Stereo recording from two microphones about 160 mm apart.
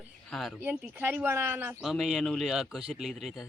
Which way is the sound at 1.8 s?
Centre (ahead or behind).